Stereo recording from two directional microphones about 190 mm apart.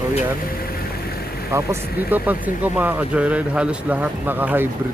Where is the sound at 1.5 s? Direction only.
15° right (ahead or behind).